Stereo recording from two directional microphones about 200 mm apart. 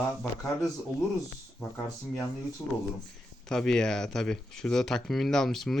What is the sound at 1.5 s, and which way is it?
Speech, 5° left (ahead or behind).